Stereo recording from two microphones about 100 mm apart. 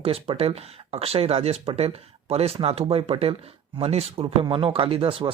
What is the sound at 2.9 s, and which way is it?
Speech, 75° right (ahead or behind).